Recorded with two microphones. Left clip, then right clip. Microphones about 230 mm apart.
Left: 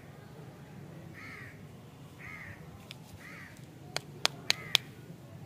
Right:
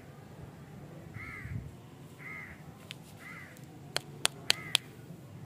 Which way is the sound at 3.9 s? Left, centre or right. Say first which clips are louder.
Left 1 dB; centre.